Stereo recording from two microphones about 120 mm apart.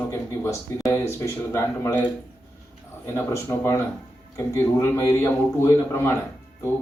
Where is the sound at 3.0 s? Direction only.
25° left (ahead or behind).